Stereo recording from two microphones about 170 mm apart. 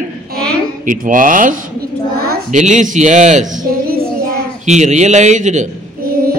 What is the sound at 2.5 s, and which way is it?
Speech, 45° right (ahead or behind).